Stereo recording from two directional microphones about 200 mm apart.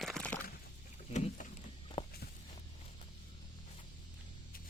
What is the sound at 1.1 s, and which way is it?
Rowboat, 35° left (ahead or behind).